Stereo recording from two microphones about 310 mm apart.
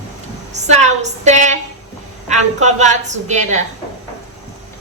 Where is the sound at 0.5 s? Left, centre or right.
Right.